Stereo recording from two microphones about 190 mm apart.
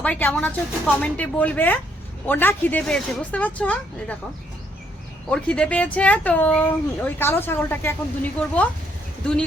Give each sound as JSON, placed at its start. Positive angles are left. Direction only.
{"t": 0.0, "sound": "speech", "side_deg": 10}
{"t": 5.3, "sound": "speech", "side_deg": 5}